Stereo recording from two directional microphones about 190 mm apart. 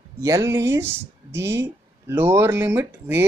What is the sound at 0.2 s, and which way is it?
Speech, 15° right (ahead or behind).